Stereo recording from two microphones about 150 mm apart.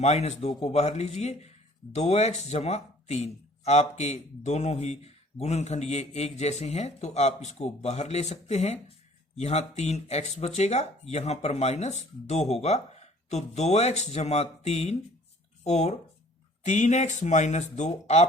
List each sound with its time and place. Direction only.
0.0 s a man's voice: 45° left (ahead or behind)